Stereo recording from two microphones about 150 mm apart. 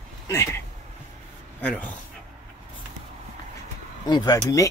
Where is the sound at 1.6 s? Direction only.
10° left (ahead or behind).